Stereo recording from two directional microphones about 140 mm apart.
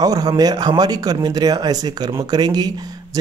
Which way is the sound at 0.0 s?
25° right (ahead or behind).